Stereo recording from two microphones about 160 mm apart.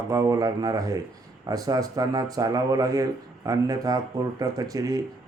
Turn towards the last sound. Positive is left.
turn(degrees=-20)  # may be behind; listen again after turning